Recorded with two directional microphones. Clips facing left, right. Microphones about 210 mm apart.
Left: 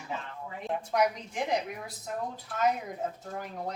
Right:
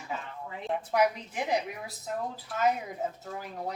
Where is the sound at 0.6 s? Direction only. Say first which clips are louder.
Right 1 dB; 5° right (ahead or behind).